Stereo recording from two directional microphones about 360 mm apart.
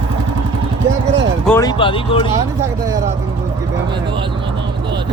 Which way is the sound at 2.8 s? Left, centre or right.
Centre.